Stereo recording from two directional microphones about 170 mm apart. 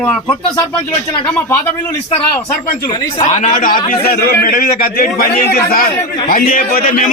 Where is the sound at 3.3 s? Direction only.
50° left (ahead or behind).